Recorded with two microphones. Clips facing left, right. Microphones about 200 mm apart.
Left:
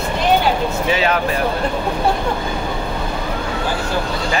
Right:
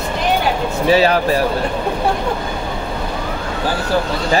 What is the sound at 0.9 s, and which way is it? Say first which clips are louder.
Speech: right 6 dB; 35° right (ahead or behind).